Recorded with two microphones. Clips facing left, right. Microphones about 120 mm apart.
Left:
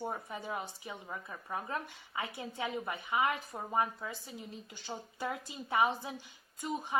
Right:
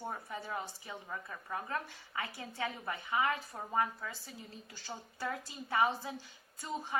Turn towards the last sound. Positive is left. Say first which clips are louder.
# left 2 dB
turn(degrees=15)  # may be behind; listen again after turning